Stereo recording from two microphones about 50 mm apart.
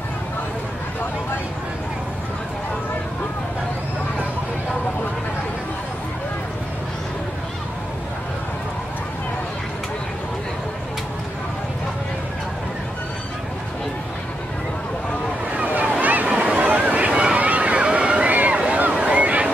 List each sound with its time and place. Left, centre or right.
15.5 s a sound: right
16.3 s waves: right
17.1 s boat: centre
17.4 s boat: right
18.8 s waves: right